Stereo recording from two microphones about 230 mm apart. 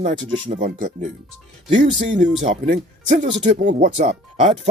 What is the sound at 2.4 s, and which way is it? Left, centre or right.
Speech, right.